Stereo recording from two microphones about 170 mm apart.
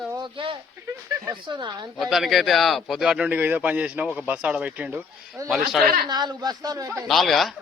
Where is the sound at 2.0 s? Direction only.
Centre (ahead or behind).